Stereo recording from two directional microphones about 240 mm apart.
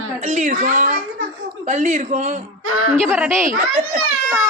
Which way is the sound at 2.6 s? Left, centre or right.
Right.